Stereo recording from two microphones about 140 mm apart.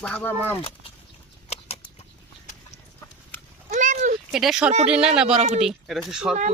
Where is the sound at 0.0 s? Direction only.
10° left (ahead or behind).